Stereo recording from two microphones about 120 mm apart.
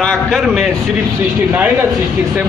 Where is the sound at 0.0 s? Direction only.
5° left (ahead or behind).